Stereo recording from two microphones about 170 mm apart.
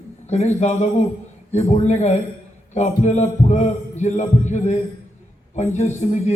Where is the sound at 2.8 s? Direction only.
45° left (ahead or behind).